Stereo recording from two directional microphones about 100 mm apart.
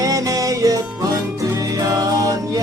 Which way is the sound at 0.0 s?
35° right (ahead or behind).